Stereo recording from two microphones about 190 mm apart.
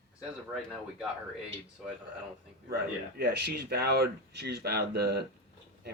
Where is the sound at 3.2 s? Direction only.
55° right (ahead or behind).